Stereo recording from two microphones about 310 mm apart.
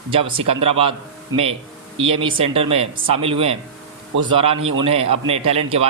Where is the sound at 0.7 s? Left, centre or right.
Centre.